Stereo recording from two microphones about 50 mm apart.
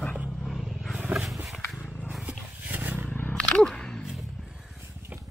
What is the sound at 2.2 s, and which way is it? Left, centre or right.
Wild animals, right.